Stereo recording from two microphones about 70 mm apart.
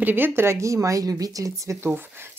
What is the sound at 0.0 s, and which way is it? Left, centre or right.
A woman's voice, right.